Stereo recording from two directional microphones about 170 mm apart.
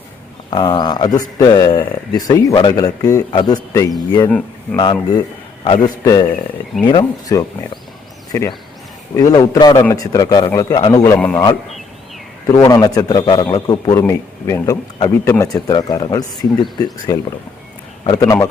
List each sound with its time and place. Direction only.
0.5 s speech: 25° left (ahead or behind)
4.3 s speech: 5° left (ahead or behind)
4.8 s speech: 25° left (ahead or behind)
12.6 s speech: 20° left (ahead or behind)